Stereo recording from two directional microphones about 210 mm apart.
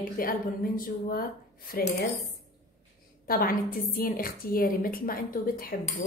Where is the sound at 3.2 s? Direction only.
45° left (ahead or behind).